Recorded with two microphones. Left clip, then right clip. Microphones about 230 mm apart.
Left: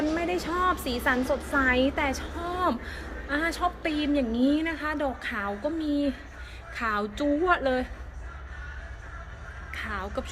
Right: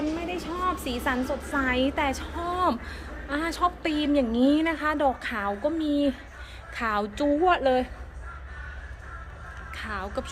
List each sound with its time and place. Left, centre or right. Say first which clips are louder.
0.3 s a woman's voice: left 3 dB; centre
9.7 s a woman's voice: even; centre